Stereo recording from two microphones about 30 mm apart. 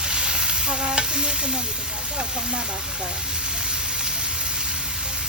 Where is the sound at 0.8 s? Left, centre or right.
Right.